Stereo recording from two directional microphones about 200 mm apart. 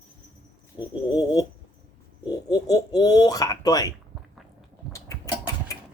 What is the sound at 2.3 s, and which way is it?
Baby laughter, 20° left (ahead or behind).